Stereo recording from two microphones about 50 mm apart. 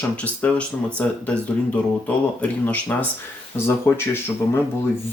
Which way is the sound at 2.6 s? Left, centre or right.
Left.